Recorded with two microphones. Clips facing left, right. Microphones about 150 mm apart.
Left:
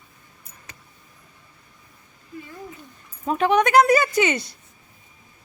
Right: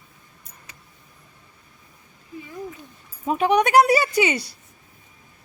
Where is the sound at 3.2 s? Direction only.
10° right (ahead or behind).